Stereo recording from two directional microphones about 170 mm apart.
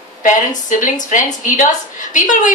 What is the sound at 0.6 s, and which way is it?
A woman's voice, 50° left (ahead or behind).